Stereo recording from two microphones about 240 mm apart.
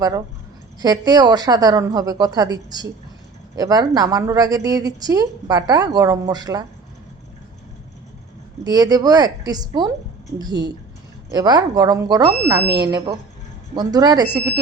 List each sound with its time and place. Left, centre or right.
0.8 s a woman's voice: centre
8.6 s a woman's voice: centre